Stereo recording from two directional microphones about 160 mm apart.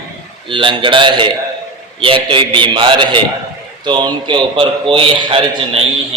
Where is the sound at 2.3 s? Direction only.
30° right (ahead or behind).